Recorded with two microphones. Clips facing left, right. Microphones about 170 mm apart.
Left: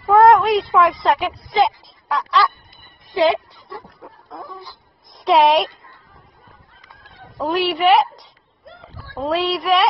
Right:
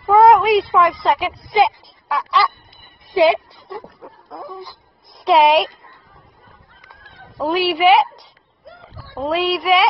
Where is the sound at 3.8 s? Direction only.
Centre (ahead or behind).